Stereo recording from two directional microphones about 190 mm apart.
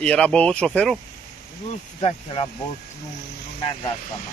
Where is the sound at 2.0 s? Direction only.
25° left (ahead or behind).